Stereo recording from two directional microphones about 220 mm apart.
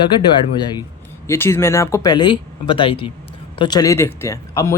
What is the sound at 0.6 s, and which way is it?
Speech, 20° left (ahead or behind).